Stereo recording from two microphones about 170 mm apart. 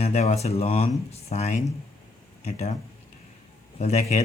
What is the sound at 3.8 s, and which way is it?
Speech, 40° left (ahead or behind).